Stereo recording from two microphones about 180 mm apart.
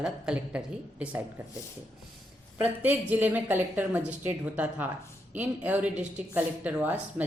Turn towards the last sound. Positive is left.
turn(degrees=-10)  # may be behind; listen again after turning